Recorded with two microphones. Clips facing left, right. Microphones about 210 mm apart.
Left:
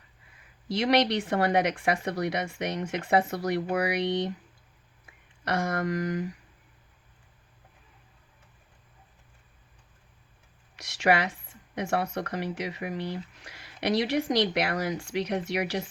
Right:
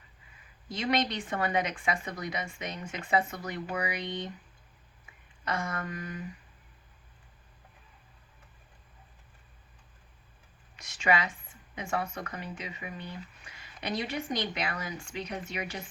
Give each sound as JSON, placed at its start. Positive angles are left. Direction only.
{"t": 0.7, "sound": "a woman's voice", "side_deg": 70}
{"t": 5.5, "sound": "speech", "side_deg": 70}
{"t": 10.8, "sound": "a woman's voice", "side_deg": 70}